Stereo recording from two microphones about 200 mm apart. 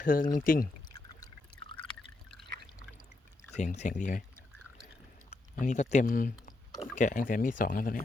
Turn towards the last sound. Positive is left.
turn(degrees=45)  # may be behind; listen again after turning